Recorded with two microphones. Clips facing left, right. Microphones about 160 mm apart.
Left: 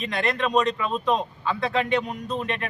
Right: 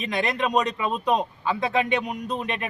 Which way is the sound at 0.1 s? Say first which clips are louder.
Even; 10° right (ahead or behind).